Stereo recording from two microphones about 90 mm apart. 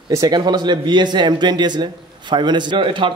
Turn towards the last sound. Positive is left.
turn(degrees=-65)  # may be behind; listen again after turning